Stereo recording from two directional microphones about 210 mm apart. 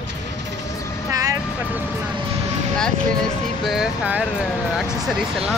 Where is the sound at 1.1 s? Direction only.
15° right (ahead or behind).